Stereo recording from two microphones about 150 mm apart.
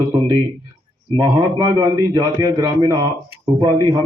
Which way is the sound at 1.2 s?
25° right (ahead or behind).